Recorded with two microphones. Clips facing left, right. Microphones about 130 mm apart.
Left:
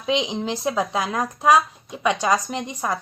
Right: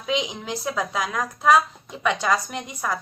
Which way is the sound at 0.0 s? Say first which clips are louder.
Left 3 dB; 25° left (ahead or behind).